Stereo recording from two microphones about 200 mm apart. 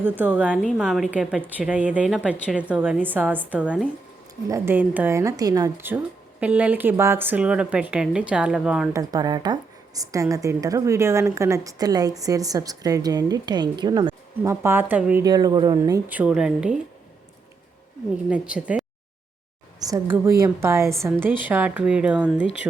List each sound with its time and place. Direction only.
0.0 s speech: 10° right (ahead or behind)
8.9 s speech: 20° right (ahead or behind)
14.5 s speech: 10° right (ahead or behind)
15.2 s speech: 20° right (ahead or behind)
18.3 s speech: 5° right (ahead or behind)
19.9 s speech: 10° right (ahead or behind)